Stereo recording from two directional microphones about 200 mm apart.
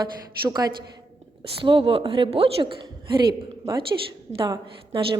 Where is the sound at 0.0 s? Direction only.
20° right (ahead or behind).